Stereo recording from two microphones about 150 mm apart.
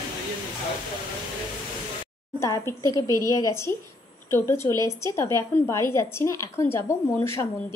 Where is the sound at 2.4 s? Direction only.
20° left (ahead or behind).